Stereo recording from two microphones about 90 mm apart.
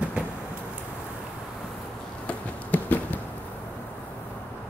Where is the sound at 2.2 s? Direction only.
20° left (ahead or behind).